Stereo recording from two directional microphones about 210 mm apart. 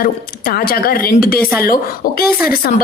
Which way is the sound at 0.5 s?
45° left (ahead or behind).